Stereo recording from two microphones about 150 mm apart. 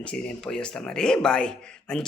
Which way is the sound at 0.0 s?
5° left (ahead or behind).